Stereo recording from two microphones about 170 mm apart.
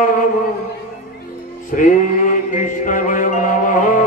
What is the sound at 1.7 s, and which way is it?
Music, 50° left (ahead or behind).